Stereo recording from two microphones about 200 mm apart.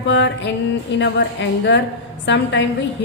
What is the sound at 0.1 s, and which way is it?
A woman's voice, 60° left (ahead or behind).